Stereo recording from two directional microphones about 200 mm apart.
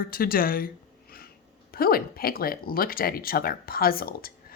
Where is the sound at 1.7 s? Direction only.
50° left (ahead or behind).